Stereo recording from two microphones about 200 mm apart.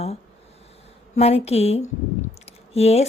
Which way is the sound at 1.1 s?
30° left (ahead or behind).